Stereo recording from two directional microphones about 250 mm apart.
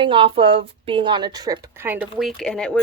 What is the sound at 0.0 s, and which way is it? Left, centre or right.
A woman's voice, right.